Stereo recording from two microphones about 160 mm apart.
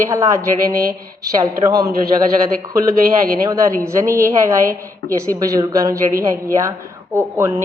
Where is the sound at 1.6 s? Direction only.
20° right (ahead or behind).